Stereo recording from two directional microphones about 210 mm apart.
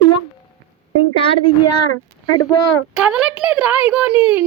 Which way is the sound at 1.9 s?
90° left.